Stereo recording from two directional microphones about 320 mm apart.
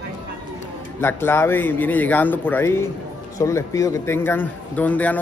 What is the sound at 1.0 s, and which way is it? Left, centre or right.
A man's voice, centre.